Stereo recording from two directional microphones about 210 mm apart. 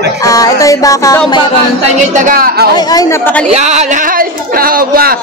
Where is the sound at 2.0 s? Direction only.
40° right (ahead or behind).